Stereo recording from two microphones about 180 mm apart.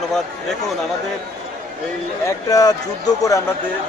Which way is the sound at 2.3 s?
20° left (ahead or behind).